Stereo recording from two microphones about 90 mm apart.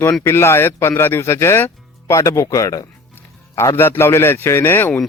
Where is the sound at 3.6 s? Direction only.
30° left (ahead or behind).